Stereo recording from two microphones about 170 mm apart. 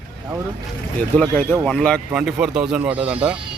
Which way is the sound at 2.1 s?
5° right (ahead or behind).